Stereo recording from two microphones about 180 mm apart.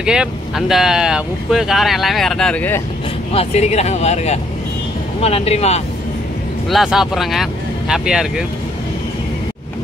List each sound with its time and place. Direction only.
0.0 s speech: 5° right (ahead or behind)
3.3 s speech: 40° left (ahead or behind)
6.7 s speech: centre (ahead or behind)